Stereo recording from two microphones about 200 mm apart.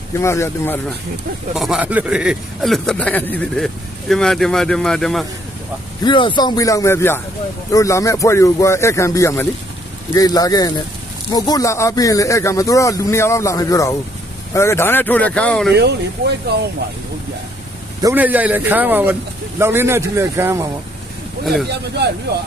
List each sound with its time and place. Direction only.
0.1 s speech: 15° left (ahead or behind)
1.5 s a man's voice: centre (ahead or behind)
6.0 s a man's voice: 25° left (ahead or behind); by 15.7 s 5° left (ahead or behind)
15.7 s speech: 55° right (ahead or behind)
18.0 s speech: 10° right (ahead or behind)
21.4 s a man's voice: centre (ahead or behind)